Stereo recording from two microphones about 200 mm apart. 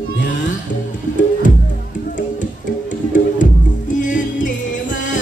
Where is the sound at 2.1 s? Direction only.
40° left (ahead or behind).